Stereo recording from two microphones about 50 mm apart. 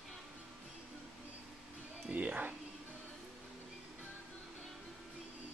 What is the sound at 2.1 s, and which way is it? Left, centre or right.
Music, right.